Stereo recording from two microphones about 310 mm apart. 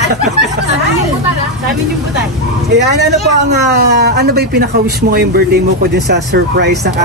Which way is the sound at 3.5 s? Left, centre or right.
Right.